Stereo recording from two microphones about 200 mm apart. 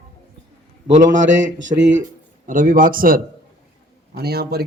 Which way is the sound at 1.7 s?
35° right (ahead or behind).